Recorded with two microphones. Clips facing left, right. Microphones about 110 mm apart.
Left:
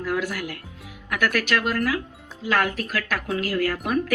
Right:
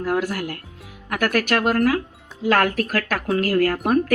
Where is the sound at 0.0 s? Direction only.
45° right (ahead or behind).